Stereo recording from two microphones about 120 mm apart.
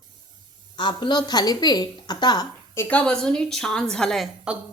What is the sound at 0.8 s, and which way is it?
A woman's voice, 40° left (ahead or behind).